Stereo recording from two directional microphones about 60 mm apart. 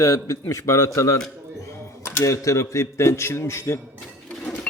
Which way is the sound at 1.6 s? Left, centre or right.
Left.